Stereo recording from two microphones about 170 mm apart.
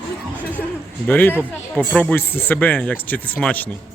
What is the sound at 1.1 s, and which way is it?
Speech, 10° left (ahead or behind).